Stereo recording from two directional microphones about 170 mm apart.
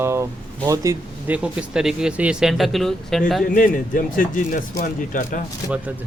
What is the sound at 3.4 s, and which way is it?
Speech, 55° left (ahead or behind).